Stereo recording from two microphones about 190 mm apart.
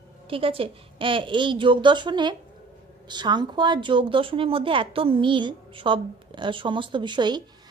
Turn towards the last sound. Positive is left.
turn(degrees=-25)  # may be behind; listen again after turning